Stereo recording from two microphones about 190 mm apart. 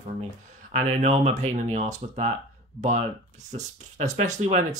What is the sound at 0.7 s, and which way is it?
Speech, 40° right (ahead or behind).